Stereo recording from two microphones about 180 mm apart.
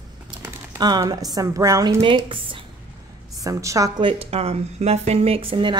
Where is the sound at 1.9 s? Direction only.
30° right (ahead or behind).